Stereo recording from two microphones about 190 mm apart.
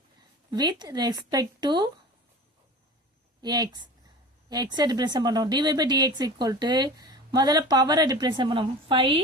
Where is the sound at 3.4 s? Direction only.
20° right (ahead or behind).